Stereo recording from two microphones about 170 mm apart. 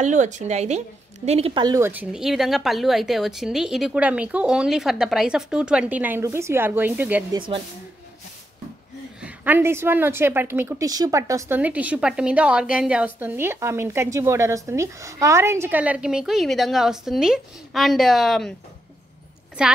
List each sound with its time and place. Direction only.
0.0 s a woman's voice: 45° right (ahead or behind)
1.6 s a woman's voice: 20° right (ahead or behind)
1.9 s speech: 5° right (ahead or behind)
7.3 s a woman's voice: 30° right (ahead or behind)
9.2 s a woman's voice: 10° right (ahead or behind)
19.6 s speech: 5° right (ahead or behind)